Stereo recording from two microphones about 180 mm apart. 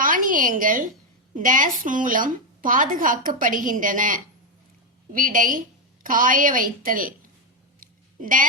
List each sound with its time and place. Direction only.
0.0 s a sound: 50° right (ahead or behind)
1.4 s a woman's voice: 45° right (ahead or behind)
8.2 s a woman's voice: 50° right (ahead or behind)